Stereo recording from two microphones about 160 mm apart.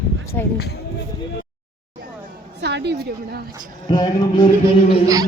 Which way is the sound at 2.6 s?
90° right.